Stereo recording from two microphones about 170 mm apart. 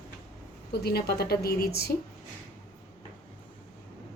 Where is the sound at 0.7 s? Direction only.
70° left (ahead or behind).